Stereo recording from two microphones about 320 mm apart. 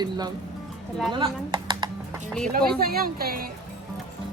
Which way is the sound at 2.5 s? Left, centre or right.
Right.